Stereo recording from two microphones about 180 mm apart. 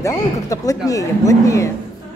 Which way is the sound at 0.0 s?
20° left (ahead or behind).